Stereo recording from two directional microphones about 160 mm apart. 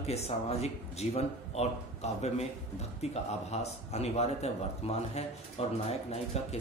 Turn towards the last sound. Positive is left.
turn(degrees=40)  # may be behind; listen again after turning